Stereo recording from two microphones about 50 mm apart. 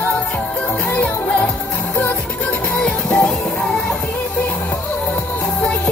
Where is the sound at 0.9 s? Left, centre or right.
Left.